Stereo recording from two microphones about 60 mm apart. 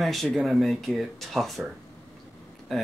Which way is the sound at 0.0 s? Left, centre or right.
Centre.